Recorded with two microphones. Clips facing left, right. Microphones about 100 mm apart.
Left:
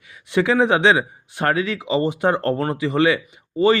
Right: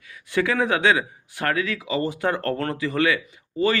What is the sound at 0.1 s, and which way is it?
Speech, 20° left (ahead or behind).